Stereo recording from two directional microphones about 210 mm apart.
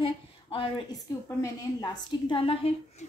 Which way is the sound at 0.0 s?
25° left (ahead or behind).